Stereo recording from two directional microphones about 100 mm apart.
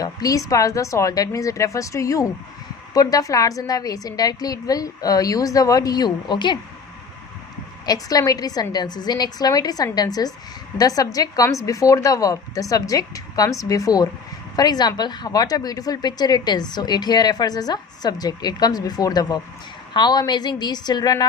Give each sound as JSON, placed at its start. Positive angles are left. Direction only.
{"t": 0.0, "sound": "a woman's voice", "side_deg": 35}
{"t": 7.9, "sound": "a woman's voice", "side_deg": 40}